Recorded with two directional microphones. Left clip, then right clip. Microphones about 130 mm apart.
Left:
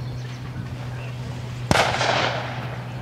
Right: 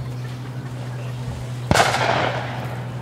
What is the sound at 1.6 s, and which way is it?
Artillery fire, 35° left (ahead or behind).